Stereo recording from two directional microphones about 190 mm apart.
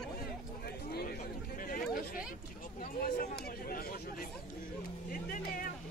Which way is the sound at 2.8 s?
50° left (ahead or behind).